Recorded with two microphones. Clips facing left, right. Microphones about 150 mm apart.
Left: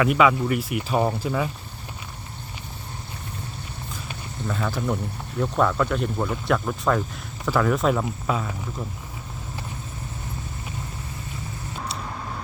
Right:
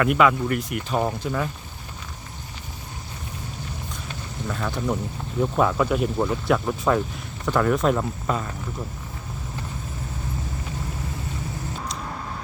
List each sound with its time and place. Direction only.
0.0 s speech: centre (ahead or behind)
4.4 s speech: centre (ahead or behind)